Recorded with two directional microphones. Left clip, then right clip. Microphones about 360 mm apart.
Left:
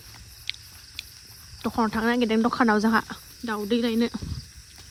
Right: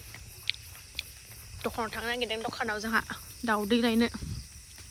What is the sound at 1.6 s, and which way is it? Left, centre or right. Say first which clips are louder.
Speech: left 8 dB; centre.